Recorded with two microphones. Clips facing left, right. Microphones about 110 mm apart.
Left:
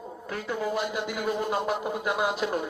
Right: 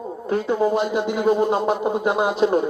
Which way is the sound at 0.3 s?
25° right (ahead or behind).